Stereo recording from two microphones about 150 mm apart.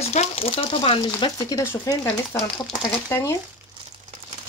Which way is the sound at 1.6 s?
20° left (ahead or behind).